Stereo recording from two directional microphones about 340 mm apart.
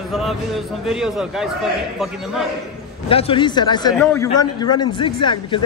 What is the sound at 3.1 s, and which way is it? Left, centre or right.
Speech, centre.